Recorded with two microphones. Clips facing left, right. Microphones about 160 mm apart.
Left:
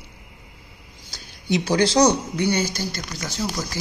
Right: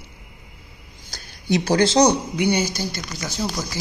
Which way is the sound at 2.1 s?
10° right (ahead or behind).